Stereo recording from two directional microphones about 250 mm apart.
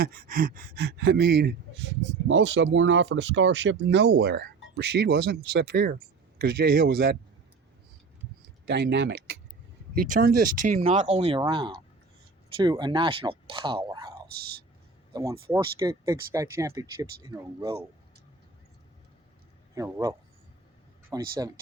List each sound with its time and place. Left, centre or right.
0.0 s speech: right
8.6 s speech: right; by 14.1 s centre
15.1 s speech: centre
19.7 s speech: centre